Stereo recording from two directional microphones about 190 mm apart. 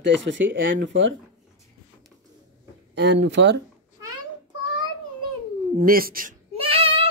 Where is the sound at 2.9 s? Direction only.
65° right (ahead or behind).